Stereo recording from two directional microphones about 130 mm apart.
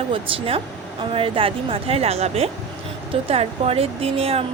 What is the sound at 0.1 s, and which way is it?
Speech, 45° right (ahead or behind).